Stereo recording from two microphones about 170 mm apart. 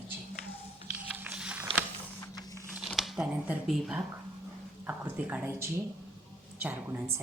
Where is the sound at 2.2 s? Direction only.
20° left (ahead or behind).